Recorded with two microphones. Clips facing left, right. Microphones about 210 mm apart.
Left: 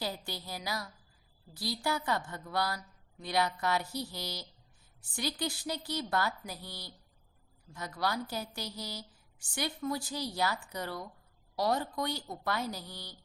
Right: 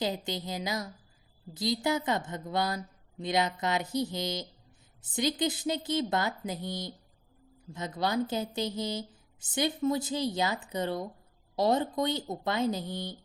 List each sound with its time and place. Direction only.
0.3 s a woman's voice: 20° right (ahead or behind)